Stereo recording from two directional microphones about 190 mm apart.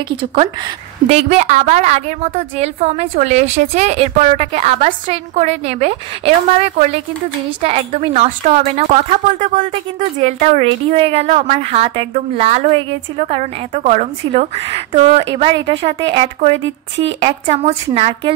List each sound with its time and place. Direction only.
1.0 s a woman's voice: 35° right (ahead or behind)